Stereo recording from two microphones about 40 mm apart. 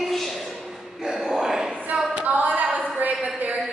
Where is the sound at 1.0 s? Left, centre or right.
Centre.